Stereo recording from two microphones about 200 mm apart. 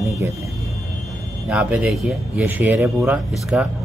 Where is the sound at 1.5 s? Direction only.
5° right (ahead or behind).